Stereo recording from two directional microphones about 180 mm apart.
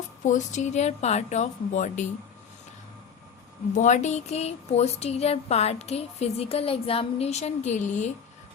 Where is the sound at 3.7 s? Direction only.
45° left (ahead or behind).